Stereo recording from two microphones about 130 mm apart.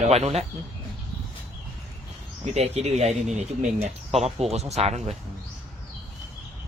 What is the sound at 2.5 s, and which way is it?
Speech, 55° right (ahead or behind).